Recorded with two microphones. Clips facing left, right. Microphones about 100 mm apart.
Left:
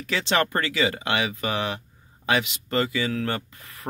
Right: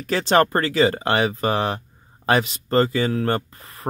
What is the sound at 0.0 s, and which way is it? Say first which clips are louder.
Speech: right 6 dB; 45° right (ahead or behind).